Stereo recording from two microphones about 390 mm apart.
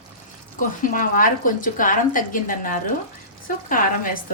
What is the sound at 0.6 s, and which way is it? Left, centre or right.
Speech, left.